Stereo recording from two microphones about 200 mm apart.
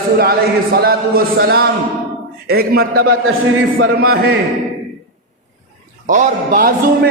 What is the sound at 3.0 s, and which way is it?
A man's voice, 90° right.